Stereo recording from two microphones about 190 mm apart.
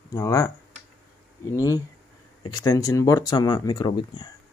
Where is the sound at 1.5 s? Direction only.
15° left (ahead or behind).